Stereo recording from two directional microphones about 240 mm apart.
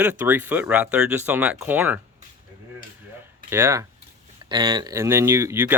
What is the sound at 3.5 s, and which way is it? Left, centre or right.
Speech, centre.